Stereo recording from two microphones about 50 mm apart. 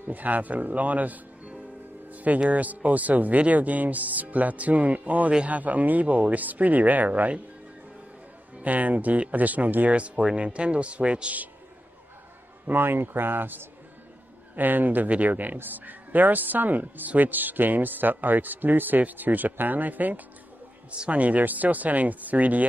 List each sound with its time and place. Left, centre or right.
0.0 s speech: right
2.0 s music: right
2.5 s speech: right
8.5 s speech: right
9.8 s speech: right
12.6 s a man's voice: right
20.9 s speech: right